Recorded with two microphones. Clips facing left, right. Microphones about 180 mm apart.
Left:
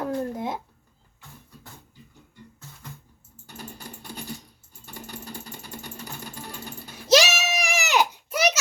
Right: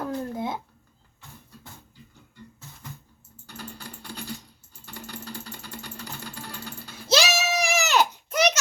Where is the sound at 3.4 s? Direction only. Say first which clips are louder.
Even; 20° left (ahead or behind).